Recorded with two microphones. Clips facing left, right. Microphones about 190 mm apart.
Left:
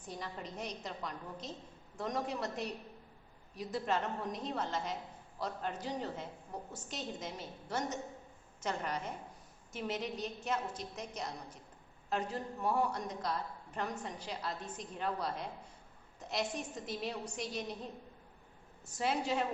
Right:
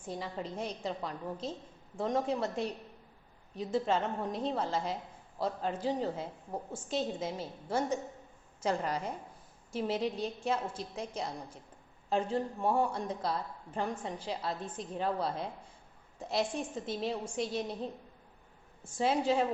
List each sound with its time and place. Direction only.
0.0 s a woman's voice: 30° right (ahead or behind)
18.9 s a woman's voice: 30° right (ahead or behind)